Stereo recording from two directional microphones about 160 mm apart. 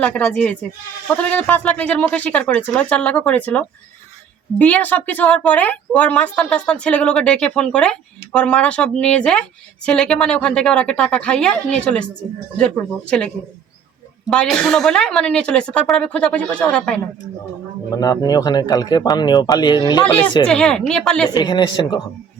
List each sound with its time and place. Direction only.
0.0 s a woman's voice: 10° left (ahead or behind)
17.9 s speech: 25° left (ahead or behind)
20.5 s a woman's voice: 5° left (ahead or behind)
21.2 s speech: 25° left (ahead or behind)